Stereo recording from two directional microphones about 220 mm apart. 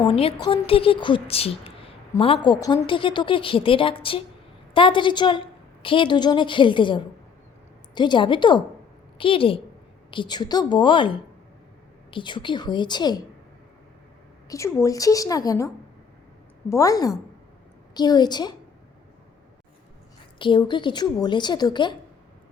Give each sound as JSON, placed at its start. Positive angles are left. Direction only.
{"t": 0.2, "sound": "a woman's voice", "side_deg": 20}
{"t": 14.5, "sound": "a woman's voice", "side_deg": 15}
{"t": 20.4, "sound": "a woman's voice", "side_deg": 20}